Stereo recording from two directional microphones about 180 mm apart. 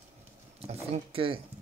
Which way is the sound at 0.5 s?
35° right (ahead or behind).